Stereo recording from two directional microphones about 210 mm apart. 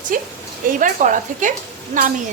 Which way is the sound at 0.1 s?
40° right (ahead or behind).